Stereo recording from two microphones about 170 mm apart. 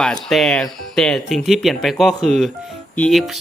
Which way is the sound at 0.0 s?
Centre (ahead or behind).